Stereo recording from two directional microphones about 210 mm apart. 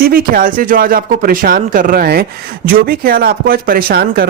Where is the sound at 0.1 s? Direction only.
40° right (ahead or behind).